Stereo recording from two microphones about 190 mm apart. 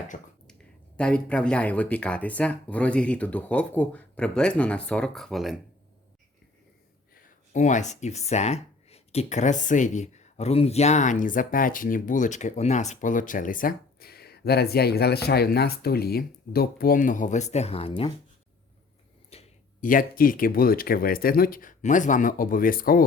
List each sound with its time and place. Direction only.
0.1 s speech: 45° left (ahead or behind)
0.9 s speech: 5° left (ahead or behind)
7.2 s speech: 40° left (ahead or behind)
19.3 s speech: 40° left (ahead or behind)